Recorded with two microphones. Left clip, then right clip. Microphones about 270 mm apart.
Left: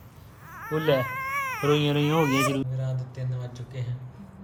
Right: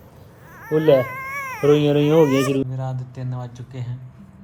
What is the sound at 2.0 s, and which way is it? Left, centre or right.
A woman's voice, centre.